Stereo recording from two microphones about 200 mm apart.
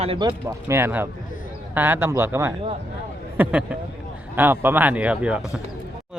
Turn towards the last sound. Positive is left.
turn(degrees=-5)  # may be behind; listen again after turning